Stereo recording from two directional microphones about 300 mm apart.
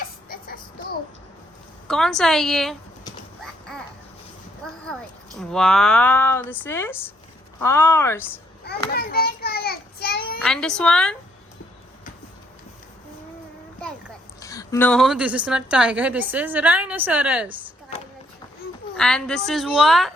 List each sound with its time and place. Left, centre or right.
0.0 s child singing: left
1.9 s a woman's voice: centre
3.4 s a sound: centre
5.4 s a woman's voice: centre
8.6 s a sound: left
10.4 s a woman's voice: centre
14.3 s a woman's voice: centre
18.9 s a woman's voice: centre